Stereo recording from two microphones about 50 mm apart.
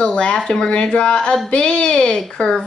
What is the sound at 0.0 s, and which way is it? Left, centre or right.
A woman's voice, centre.